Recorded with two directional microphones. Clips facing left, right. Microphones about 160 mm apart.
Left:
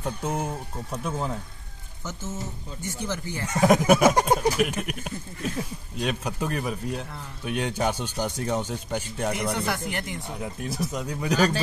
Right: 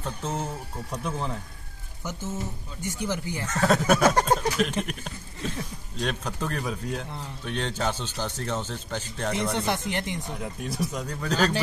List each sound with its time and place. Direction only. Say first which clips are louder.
0.0 s speech: left 3 dB; 10° left (ahead or behind)
2.8 s speech: right 2 dB; 15° right (ahead or behind)
3.4 s speech: left 4 dB; 15° left (ahead or behind)
9.6 s speech: right 1 dB; 20° right (ahead or behind)
10.2 s speech: left 1 dB; 5° left (ahead or behind)